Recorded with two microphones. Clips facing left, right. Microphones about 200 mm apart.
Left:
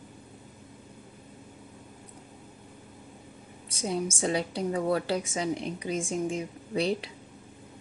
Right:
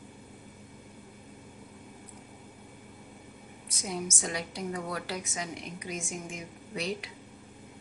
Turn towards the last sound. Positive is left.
turn(degrees=30)  # may be behind; listen again after turning